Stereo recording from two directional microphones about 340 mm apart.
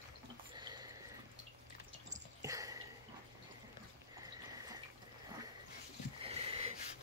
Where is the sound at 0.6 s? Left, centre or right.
Centre.